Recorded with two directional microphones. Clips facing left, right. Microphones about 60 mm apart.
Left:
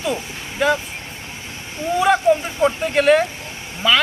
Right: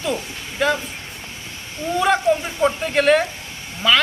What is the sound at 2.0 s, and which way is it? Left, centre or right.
Speech, centre.